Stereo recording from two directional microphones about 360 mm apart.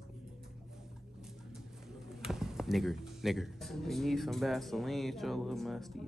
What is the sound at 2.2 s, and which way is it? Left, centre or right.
Speech, centre.